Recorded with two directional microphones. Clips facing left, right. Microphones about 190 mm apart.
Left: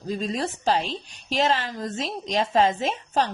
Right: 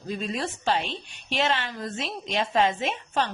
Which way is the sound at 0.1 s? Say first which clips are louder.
Left 3 dB; 35° left (ahead or behind).